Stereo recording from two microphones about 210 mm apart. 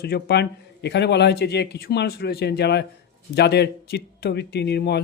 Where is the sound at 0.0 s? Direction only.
50° left (ahead or behind).